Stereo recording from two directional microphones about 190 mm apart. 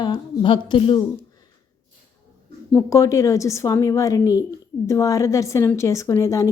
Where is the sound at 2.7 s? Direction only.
15° left (ahead or behind).